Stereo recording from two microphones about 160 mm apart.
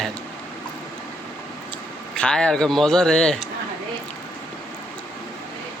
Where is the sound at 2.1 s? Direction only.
5° left (ahead or behind).